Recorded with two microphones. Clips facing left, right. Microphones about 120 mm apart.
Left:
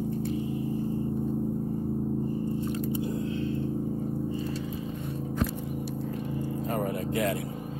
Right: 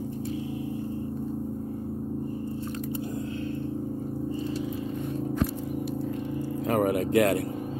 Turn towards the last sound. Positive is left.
turn(degrees=-70)  # may be behind; listen again after turning